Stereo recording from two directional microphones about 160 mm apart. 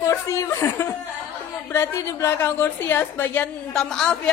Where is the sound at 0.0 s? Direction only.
20° left (ahead or behind).